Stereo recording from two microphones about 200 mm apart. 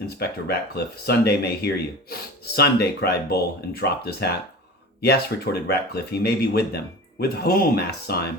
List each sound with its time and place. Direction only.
0.2 s speech: 55° left (ahead or behind)